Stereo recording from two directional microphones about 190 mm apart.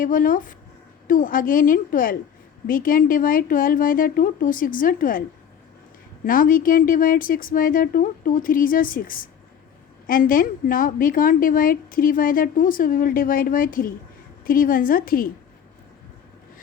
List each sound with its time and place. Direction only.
0.0 s a woman's voice: 45° left (ahead or behind)
6.2 s a woman's voice: 45° left (ahead or behind)